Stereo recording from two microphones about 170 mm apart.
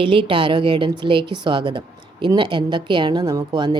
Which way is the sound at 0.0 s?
30° right (ahead or behind).